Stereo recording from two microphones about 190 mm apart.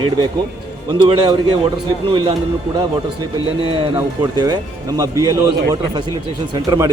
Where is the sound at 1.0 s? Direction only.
25° right (ahead or behind).